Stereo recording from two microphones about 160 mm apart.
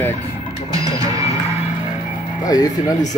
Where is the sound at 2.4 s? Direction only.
25° left (ahead or behind).